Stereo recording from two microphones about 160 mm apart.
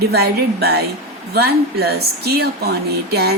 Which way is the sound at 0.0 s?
85° right.